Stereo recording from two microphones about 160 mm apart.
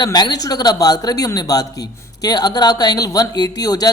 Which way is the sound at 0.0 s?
25° left (ahead or behind).